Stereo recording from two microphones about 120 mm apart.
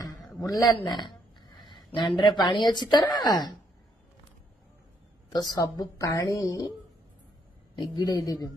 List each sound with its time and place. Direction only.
0.4 s a man's voice: 30° left (ahead or behind)
0.7 s a sound: 40° left (ahead or behind)
1.9 s speech: 40° left (ahead or behind)
5.3 s speech: 35° left (ahead or behind)
7.7 s speech: 35° left (ahead or behind)